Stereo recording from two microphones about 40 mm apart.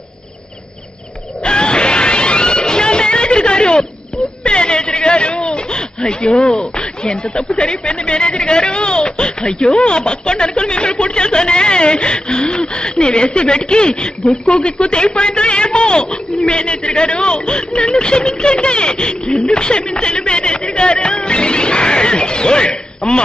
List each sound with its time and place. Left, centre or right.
1.4 s music: left
4.4 s a sound: left
6.2 s speech: left